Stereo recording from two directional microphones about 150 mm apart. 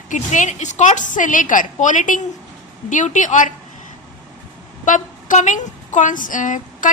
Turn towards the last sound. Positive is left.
turn(degrees=60)  # may be behind; listen again after turning